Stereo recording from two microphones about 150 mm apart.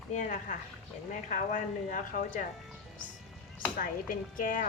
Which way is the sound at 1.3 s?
60° left (ahead or behind).